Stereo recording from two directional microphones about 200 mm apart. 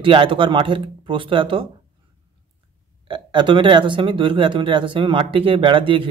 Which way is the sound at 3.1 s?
25° right (ahead or behind).